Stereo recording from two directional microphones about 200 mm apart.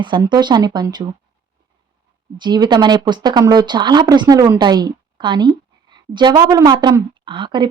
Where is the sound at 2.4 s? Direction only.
20° right (ahead or behind).